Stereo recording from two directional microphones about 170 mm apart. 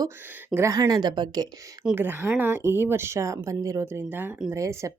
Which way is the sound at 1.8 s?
10° right (ahead or behind).